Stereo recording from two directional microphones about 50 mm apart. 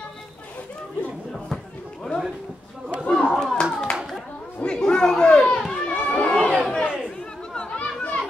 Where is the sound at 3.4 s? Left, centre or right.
Centre.